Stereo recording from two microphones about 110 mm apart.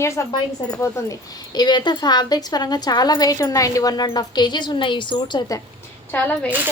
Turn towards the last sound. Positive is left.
turn(degrees=15)  # may be behind; listen again after turning